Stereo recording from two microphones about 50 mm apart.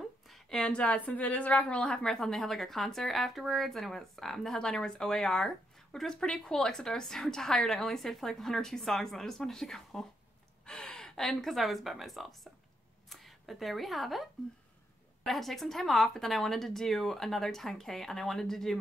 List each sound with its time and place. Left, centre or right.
0.3 s a sound: centre
0.7 s a woman's voice: left
2.1 s a woman's voice: centre
10.6 s speech: centre
15.2 s a woman's voice: centre